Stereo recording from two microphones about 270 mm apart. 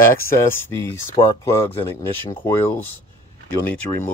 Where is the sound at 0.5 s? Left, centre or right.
Centre.